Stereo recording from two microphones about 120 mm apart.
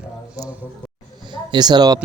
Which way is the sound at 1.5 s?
35° right (ahead or behind).